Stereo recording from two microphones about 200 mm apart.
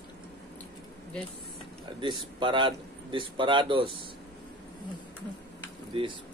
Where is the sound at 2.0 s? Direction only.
25° right (ahead or behind).